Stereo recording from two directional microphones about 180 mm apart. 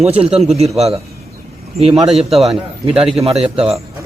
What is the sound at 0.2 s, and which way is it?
Speech, 35° right (ahead or behind).